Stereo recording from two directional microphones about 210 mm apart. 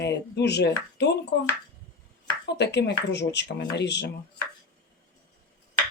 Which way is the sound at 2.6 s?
55° left (ahead or behind).